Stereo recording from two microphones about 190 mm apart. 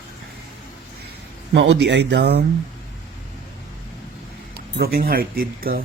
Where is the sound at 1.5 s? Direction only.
65° right (ahead or behind).